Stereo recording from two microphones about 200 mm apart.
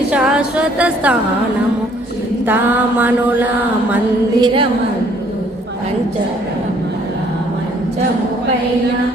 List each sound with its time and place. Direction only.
0.1 s music: 5° right (ahead or behind)
3.0 s a sound: 10° right (ahead or behind)
4.4 s a woman's voice: 20° right (ahead or behind)